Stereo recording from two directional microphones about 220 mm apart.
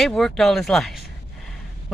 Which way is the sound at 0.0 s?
Centre (ahead or behind).